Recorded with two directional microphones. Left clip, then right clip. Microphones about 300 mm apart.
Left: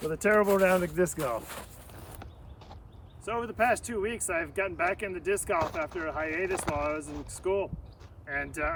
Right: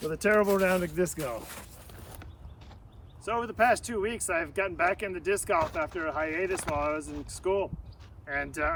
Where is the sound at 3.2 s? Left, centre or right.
Centre.